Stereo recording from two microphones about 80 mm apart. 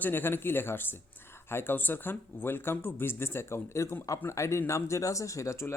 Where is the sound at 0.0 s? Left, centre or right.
Left.